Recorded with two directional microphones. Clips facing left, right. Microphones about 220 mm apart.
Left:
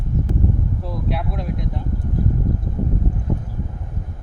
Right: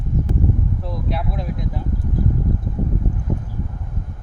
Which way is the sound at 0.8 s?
Centre (ahead or behind).